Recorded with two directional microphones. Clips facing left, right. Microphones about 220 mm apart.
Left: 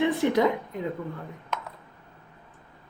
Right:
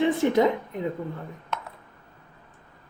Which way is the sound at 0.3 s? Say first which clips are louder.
Right 2 dB; 20° right (ahead or behind).